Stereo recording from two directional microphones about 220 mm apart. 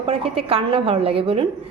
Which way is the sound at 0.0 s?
25° right (ahead or behind).